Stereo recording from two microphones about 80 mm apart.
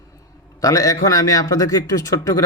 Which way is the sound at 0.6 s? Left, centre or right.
Left.